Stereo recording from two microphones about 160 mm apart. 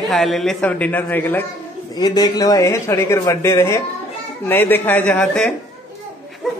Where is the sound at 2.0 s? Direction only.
25° left (ahead or behind); by 5.5 s 5° left (ahead or behind).